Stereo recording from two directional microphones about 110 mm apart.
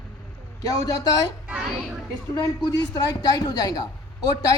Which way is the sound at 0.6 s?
30° left (ahead or behind).